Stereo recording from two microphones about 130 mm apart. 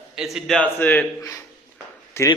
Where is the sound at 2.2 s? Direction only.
20° left (ahead or behind).